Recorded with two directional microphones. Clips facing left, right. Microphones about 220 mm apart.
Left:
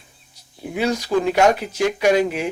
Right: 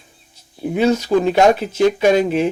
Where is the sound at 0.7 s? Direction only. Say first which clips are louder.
Right 5 dB; 25° right (ahead or behind).